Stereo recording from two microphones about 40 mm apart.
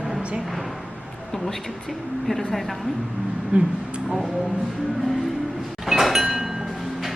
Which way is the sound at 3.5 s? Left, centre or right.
Right.